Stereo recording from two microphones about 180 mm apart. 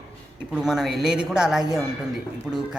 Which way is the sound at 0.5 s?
Centre (ahead or behind).